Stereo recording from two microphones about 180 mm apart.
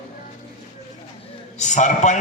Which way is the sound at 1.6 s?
40° left (ahead or behind).